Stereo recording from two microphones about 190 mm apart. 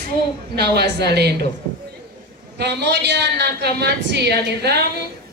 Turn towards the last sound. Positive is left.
turn(degrees=-60)  # may be behind; listen again after turning